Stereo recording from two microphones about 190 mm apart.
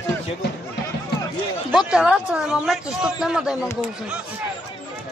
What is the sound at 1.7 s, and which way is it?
Speech, 5° right (ahead or behind).